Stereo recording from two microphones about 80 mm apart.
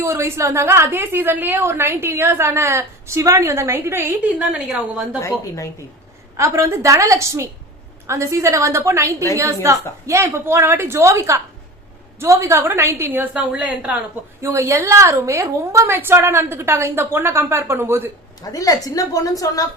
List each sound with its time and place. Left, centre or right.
0.0 s a woman's voice: right
4.5 s a woman's voice: centre
6.3 s a woman's voice: right; by 14.0 s centre
14.4 s a woman's voice: right
15.9 s a woman's voice: right
18.5 s a woman's voice: left